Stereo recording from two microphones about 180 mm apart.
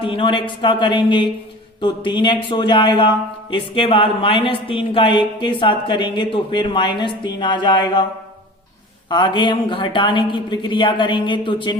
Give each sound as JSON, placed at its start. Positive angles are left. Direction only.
{"t": 0.0, "sound": "speech", "side_deg": 30}
{"t": 9.0, "sound": "speech", "side_deg": 25}